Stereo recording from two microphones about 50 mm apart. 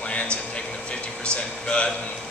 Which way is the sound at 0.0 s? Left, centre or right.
Left.